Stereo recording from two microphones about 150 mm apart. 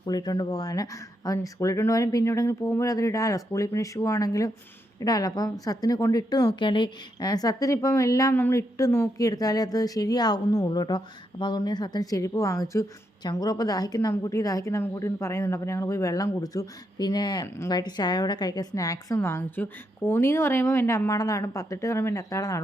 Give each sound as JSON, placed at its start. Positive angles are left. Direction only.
{"t": 0.0, "sound": "a woman's voice", "side_deg": 25}